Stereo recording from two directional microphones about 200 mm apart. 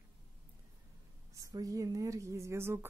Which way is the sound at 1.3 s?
15° right (ahead or behind).